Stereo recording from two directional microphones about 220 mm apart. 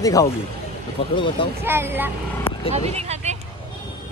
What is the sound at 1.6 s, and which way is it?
Speech, 10° right (ahead or behind).